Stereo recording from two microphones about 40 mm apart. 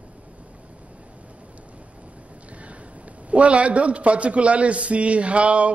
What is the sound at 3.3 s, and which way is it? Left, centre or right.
A man's voice, right.